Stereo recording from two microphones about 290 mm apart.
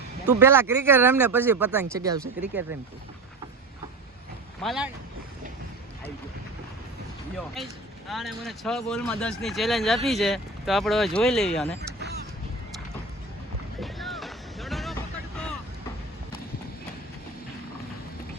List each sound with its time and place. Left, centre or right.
0.3 s speech: centre
4.6 s speech: centre
7.3 s speech: centre
11.8 s a sound: right
13.7 s music: centre